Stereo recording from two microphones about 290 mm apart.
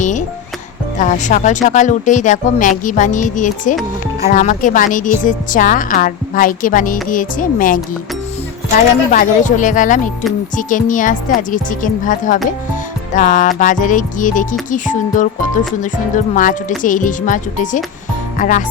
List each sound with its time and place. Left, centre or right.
0.0 s music: left
0.9 s speech: left